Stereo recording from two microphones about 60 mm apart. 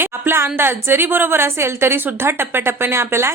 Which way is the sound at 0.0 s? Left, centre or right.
Right.